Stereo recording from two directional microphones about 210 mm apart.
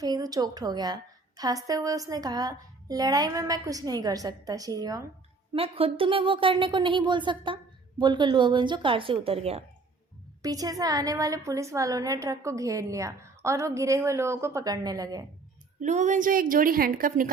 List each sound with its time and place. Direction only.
0.0 s a woman's voice: 15° right (ahead or behind)
5.5 s speech: 25° right (ahead or behind)
10.4 s a woman's voice: 15° right (ahead or behind)
15.8 s a woman's voice: 35° right (ahead or behind)